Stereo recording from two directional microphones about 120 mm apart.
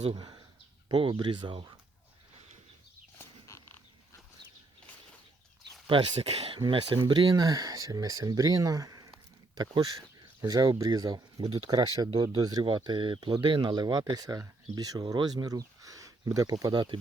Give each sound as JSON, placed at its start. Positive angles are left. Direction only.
{"t": 0.1, "sound": "speech", "side_deg": -40}
{"t": 3.2, "sound": "a sound", "side_deg": 20}
{"t": 5.9, "sound": "speech", "side_deg": -55}
{"t": 6.6, "sound": "speech", "side_deg": -40}